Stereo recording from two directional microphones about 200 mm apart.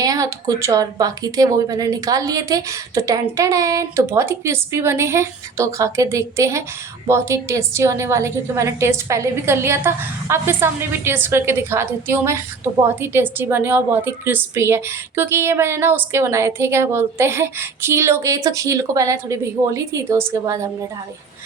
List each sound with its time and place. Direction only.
0.0 s a woman's voice: 20° right (ahead or behind)